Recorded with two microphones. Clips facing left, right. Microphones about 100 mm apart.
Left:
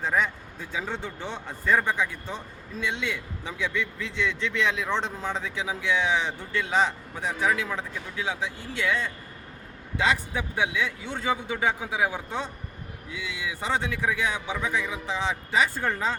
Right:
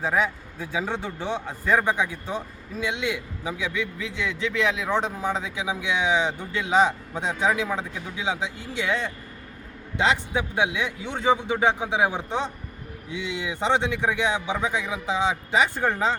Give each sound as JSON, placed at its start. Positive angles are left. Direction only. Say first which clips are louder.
{"t": 0.0, "sound": "a man's voice", "louder": "right 2 dB", "side_deg": -10}